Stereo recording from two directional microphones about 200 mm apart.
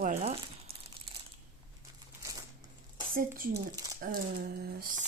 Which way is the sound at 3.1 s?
45° right (ahead or behind).